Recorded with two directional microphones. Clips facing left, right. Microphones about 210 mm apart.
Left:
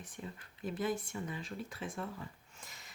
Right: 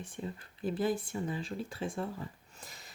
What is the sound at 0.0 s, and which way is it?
A woman's voice, 30° right (ahead or behind).